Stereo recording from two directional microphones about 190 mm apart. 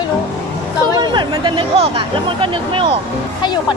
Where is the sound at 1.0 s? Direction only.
25° right (ahead or behind).